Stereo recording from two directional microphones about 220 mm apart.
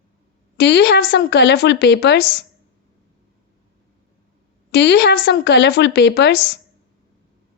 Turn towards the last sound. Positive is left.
turn(degrees=50)  # may be behind; listen again after turning